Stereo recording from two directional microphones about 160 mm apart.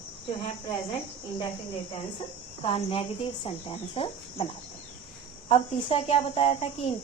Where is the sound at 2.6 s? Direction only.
35° left (ahead or behind).